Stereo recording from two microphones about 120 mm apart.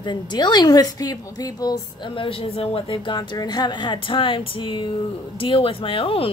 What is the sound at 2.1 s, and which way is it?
Speech, 50° left (ahead or behind).